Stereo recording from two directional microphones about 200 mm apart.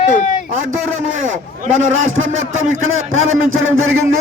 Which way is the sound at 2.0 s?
75° right (ahead or behind).